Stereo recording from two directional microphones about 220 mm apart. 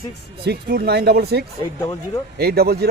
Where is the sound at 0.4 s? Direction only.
45° right (ahead or behind).